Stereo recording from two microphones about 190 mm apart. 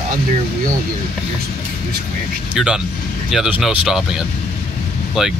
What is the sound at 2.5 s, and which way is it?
Speech, 5° right (ahead or behind).